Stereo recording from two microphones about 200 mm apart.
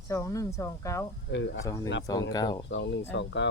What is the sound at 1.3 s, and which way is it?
Speech, 60° left (ahead or behind).